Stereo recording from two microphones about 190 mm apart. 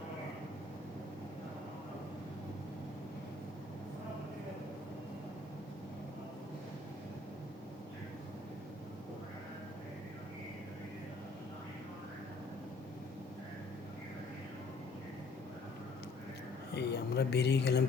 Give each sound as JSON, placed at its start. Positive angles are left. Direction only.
{"t": 16.7, "sound": "speech", "side_deg": 60}